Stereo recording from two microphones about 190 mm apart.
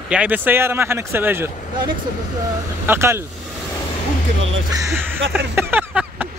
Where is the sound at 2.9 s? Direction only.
15° right (ahead or behind).